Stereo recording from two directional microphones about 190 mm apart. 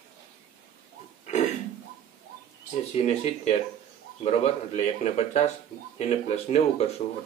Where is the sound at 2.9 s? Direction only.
30° left (ahead or behind).